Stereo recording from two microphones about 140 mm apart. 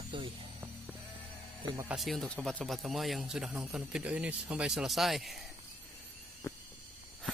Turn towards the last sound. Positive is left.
turn(degrees=15)  # may be behind; listen again after turning